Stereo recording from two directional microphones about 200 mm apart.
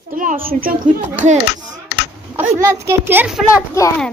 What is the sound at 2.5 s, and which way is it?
Speech, 15° right (ahead or behind).